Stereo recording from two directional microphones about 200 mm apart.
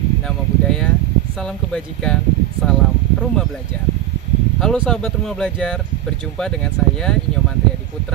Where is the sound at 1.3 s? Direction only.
5° left (ahead or behind).